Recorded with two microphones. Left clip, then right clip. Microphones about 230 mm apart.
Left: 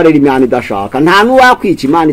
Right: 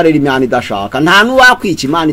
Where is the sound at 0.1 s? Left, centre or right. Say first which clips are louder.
Left 3 dB; right.